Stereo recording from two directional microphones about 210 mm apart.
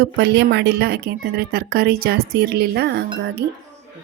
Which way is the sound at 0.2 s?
55° right (ahead or behind).